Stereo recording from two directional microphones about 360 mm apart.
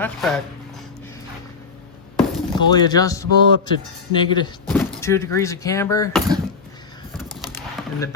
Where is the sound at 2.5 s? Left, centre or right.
Centre.